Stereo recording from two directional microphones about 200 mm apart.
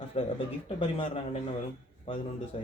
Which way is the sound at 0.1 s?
30° left (ahead or behind).